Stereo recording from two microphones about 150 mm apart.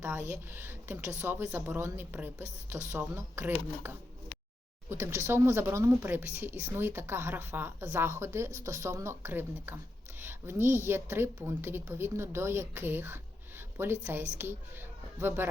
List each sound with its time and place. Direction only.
0.0 s speech: 15° right (ahead or behind)
4.9 s speech: 15° right (ahead or behind)